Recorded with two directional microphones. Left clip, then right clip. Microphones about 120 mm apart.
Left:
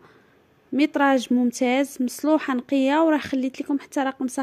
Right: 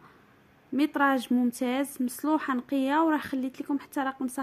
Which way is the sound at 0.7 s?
35° left (ahead or behind).